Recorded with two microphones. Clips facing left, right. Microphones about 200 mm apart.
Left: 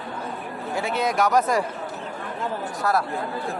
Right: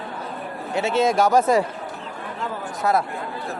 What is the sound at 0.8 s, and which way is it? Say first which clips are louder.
Speech: right 4 dB; 25° right (ahead or behind).